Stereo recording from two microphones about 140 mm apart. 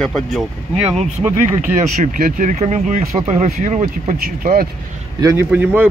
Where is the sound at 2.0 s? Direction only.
80° right.